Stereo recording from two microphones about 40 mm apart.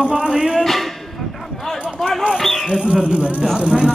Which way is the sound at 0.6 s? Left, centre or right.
Centre.